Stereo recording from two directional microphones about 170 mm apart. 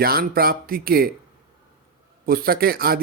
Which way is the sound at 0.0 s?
60° right (ahead or behind).